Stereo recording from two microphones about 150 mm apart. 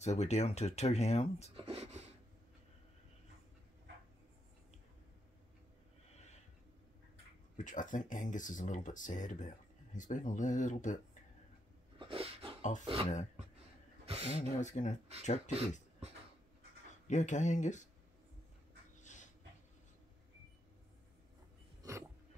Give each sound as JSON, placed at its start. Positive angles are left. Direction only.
{"t": 0.0, "sound": "speech", "side_deg": 50}
{"t": 1.6, "sound": "a sound", "side_deg": -40}
{"t": 7.5, "sound": "speech", "side_deg": 60}
{"t": 12.0, "sound": "dog", "side_deg": -40}
{"t": 12.8, "sound": "speech", "side_deg": -40}
{"t": 14.6, "sound": "speech", "side_deg": 55}
{"t": 17.1, "sound": "speech", "side_deg": 55}
{"t": 18.9, "sound": "dog", "side_deg": 55}